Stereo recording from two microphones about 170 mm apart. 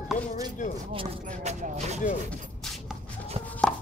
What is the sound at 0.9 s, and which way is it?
Speech, 40° right (ahead or behind).